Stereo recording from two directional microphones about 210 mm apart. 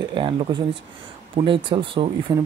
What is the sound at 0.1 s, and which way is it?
Speech, 25° right (ahead or behind).